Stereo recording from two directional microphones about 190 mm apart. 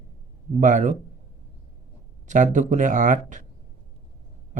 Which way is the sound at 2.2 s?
40° right (ahead or behind).